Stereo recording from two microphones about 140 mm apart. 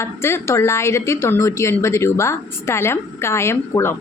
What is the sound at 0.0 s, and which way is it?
A woman's voice, 20° left (ahead or behind).